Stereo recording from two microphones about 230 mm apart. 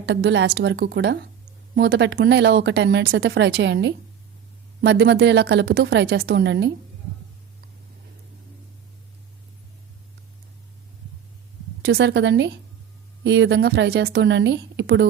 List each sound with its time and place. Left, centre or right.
0.0 s speech: right
11.8 s speech: right